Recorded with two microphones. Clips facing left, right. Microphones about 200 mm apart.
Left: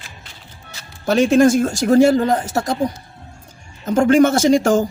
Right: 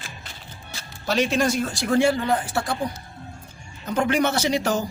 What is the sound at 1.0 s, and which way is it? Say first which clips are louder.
Speech: left 9 dB; 50° left (ahead or behind).